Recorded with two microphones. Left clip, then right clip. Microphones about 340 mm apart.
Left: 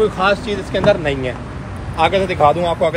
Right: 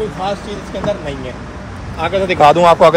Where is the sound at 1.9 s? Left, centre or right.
Centre.